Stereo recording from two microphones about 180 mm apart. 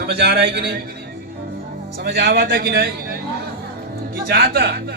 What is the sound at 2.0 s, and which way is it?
A man's voice, 65° right (ahead or behind).